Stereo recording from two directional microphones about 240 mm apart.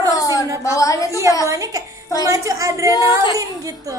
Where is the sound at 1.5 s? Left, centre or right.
Centre.